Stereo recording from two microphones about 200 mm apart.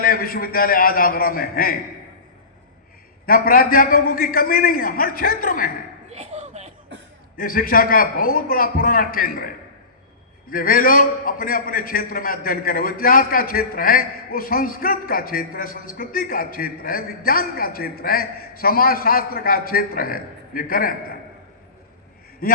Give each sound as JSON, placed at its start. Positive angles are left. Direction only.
{"t": 0.0, "sound": "a man's voice", "side_deg": 45}
{"t": 3.2, "sound": "a man's voice", "side_deg": 45}
{"t": 6.1, "sound": "chuckle", "side_deg": -35}
{"t": 7.3, "sound": "a man's voice", "side_deg": 45}
{"t": 10.5, "sound": "a man's voice", "side_deg": 45}
{"t": 22.4, "sound": "a man's voice", "side_deg": 45}